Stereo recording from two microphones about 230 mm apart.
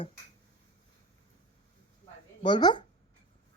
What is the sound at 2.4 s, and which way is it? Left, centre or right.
Speech, centre.